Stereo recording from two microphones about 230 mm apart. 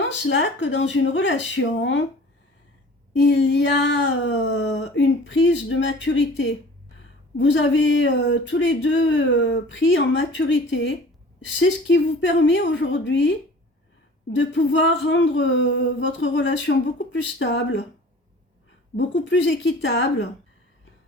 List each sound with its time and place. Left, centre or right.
0.3 s speech: left
3.1 s speech: left
14.3 s speech: left
18.9 s speech: left